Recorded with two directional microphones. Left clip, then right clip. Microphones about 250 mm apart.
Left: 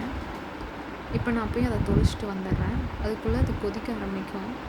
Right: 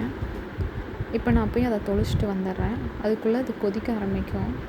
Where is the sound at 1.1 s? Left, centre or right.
Centre.